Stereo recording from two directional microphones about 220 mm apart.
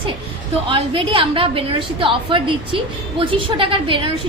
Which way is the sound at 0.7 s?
25° right (ahead or behind).